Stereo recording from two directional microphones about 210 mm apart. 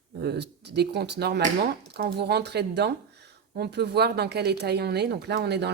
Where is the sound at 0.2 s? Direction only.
50° right (ahead or behind).